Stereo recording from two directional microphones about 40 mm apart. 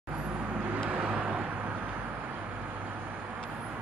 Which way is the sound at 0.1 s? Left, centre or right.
Right.